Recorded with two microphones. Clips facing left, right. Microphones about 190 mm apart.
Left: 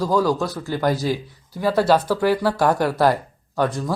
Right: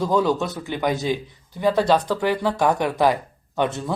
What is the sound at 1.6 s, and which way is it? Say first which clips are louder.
Speech: left 1 dB; 10° left (ahead or behind).